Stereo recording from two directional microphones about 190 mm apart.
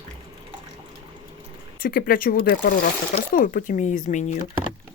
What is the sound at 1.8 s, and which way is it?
Speech, 50° left (ahead or behind).